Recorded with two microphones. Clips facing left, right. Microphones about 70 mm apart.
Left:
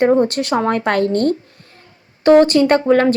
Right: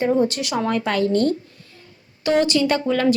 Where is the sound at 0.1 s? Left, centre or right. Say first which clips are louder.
Left 5 dB; left.